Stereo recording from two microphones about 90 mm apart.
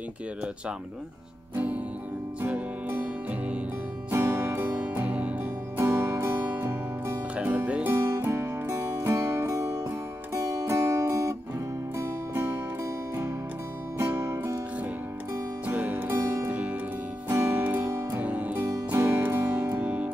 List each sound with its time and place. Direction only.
1.5 s music: 15° right (ahead or behind)
4.1 s music: 25° right (ahead or behind)
7.9 s music: 30° right (ahead or behind)
12.4 s music: 35° right (ahead or behind)
15.6 s music: 20° right (ahead or behind)